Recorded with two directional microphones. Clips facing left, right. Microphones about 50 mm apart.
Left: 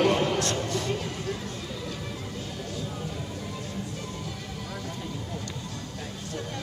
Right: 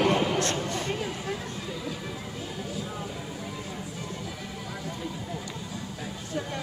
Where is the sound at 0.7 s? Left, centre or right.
Right.